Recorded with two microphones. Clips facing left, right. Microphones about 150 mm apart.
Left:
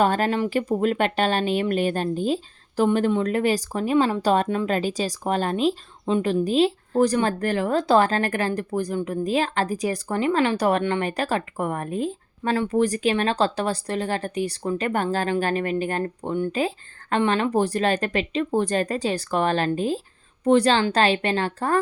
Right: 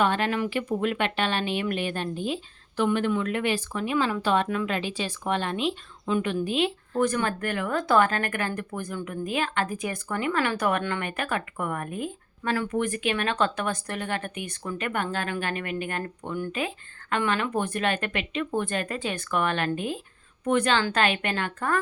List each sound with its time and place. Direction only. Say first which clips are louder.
0.0 s speech: left 4 dB; 40° left (ahead or behind)